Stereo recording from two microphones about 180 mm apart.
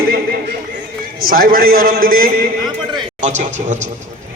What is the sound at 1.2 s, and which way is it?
A man's voice, 55° right (ahead or behind).